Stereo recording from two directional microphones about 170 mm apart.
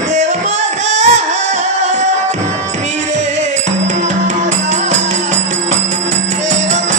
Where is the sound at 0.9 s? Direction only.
45° right (ahead or behind).